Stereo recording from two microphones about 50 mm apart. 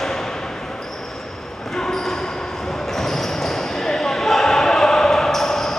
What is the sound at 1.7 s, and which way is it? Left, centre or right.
Basketball bounce, centre.